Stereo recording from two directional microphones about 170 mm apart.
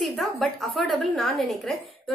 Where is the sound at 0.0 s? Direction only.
Centre (ahead or behind).